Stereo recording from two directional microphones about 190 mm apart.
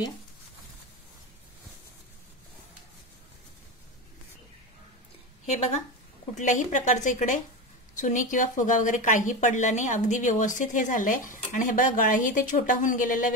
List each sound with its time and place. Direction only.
6.3 s speech: 40° left (ahead or behind)